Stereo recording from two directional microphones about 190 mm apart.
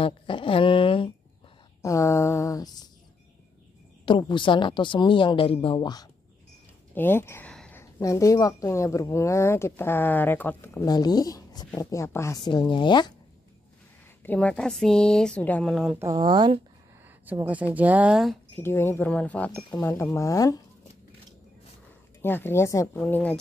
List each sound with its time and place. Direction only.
0.0 s a sound: 25° left (ahead or behind)
1.8 s a sound: 15° left (ahead or behind)
4.0 s a woman's voice: 25° left (ahead or behind)
7.0 s a sound: 10° left (ahead or behind)
7.8 s a woman's voice: 15° left (ahead or behind)
14.2 s speech: 10° left (ahead or behind)
16.0 s speech: 20° right (ahead or behind)
17.3 s speech: 10° right (ahead or behind)
18.6 s a woman's voice: 10° left (ahead or behind)
22.2 s a woman's voice: 10° left (ahead or behind)